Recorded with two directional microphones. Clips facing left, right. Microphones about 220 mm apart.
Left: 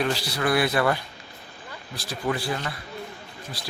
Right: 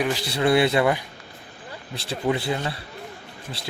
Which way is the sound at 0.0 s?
20° right (ahead or behind).